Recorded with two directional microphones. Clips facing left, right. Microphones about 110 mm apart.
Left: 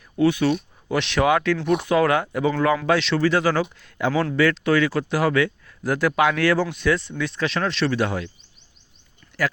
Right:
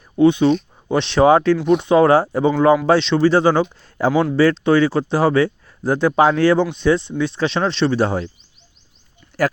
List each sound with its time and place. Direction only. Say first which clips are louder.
0.2 s speech: right 6 dB; 25° right (ahead or behind)
4.1 s speech: right 5 dB; 15° right (ahead or behind)
4.4 s speech: right 4 dB; 30° right (ahead or behind)